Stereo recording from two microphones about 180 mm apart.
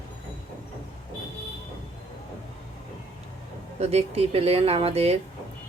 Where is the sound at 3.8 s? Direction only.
35° right (ahead or behind).